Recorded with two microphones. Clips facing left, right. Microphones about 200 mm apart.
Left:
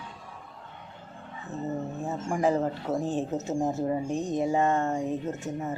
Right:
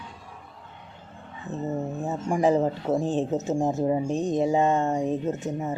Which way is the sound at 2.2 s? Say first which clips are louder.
Right 4 dB; 20° right (ahead or behind).